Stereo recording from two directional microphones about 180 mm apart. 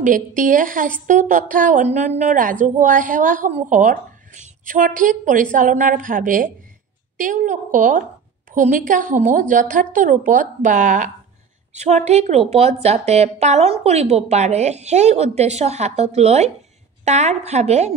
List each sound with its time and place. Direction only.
0.4 s a woman's voice: 50° right (ahead or behind)